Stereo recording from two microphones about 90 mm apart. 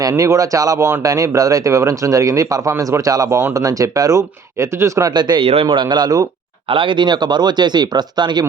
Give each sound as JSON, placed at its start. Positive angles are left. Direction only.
{"t": 0.0, "sound": "speech", "side_deg": -40}
{"t": 5.4, "sound": "speech", "side_deg": -75}
{"t": 6.7, "sound": "speech", "side_deg": -70}